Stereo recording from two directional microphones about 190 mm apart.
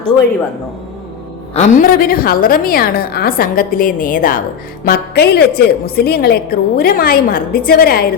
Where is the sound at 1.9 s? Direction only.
50° left (ahead or behind).